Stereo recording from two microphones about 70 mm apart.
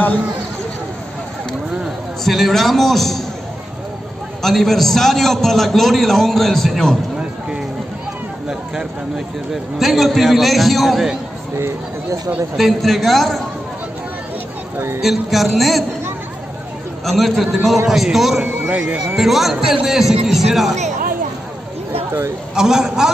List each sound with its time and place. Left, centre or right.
2.2 s a man's voice: centre
4.4 s a man's voice: centre
9.5 s a man's voice: centre
11.5 s speech: right
12.5 s a man's voice: centre
15.0 s a man's voice: centre
17.0 s a man's voice: centre
18.4 s speech: centre
19.1 s a man's voice: centre
22.6 s a man's voice: centre